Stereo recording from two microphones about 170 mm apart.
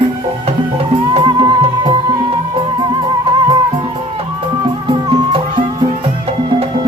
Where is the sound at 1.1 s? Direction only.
25° right (ahead or behind).